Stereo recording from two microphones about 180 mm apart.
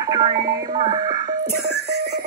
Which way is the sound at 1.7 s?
65° right (ahead or behind).